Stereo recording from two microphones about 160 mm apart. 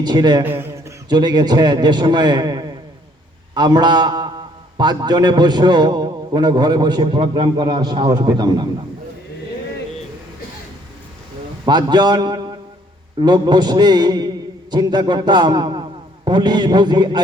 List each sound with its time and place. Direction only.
0.0 s a man's voice: 25° right (ahead or behind)
0.4 s a sound: 15° right (ahead or behind)
1.1 s a man's voice: 25° right (ahead or behind)
11.6 s a man's voice: 25° right (ahead or behind)